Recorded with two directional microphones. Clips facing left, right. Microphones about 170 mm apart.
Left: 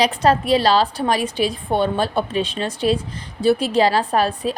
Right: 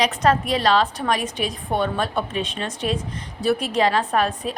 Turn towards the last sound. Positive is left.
turn(degrees=35)  # may be behind; listen again after turning